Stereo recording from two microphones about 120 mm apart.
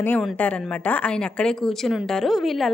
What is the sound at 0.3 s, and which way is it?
A woman's voice, 15° left (ahead or behind).